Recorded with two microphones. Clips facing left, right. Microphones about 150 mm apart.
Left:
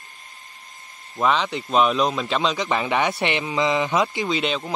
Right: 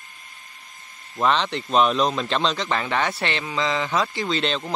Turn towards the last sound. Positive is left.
turn(degrees=10)  # may be behind; listen again after turning